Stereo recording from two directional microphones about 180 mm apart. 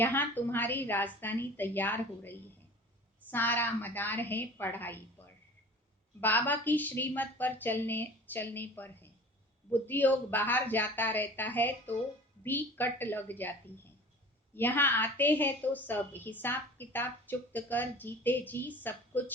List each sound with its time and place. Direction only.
0.0 s a woman's voice: 10° left (ahead or behind)
14.5 s a woman's voice: 10° left (ahead or behind)